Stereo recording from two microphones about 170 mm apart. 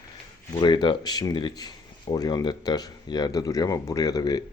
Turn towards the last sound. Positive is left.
turn(degrees=25)  # may be behind; listen again after turning